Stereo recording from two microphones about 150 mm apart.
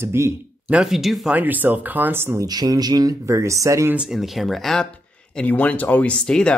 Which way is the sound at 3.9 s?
5° right (ahead or behind).